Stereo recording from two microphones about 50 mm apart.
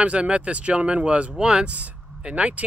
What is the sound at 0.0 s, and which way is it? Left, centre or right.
Speech, right.